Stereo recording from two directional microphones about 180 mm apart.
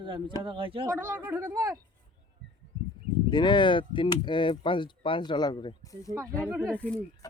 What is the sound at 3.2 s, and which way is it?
Speech, 25° left (ahead or behind).